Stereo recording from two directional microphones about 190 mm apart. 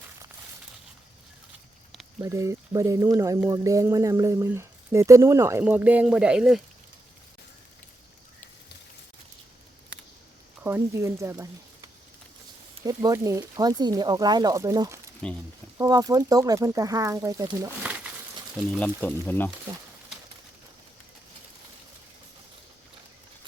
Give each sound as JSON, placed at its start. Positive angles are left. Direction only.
{"t": 2.2, "sound": "speech", "side_deg": -15}
{"t": 10.6, "sound": "speech", "side_deg": -10}
{"t": 15.2, "sound": "speech", "side_deg": 5}
{"t": 15.8, "sound": "speech", "side_deg": -20}
{"t": 17.8, "sound": "crumpling", "side_deg": -5}
{"t": 18.5, "sound": "speech", "side_deg": 5}